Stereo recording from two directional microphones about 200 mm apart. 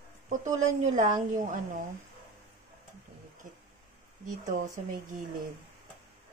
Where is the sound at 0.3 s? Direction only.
40° right (ahead or behind).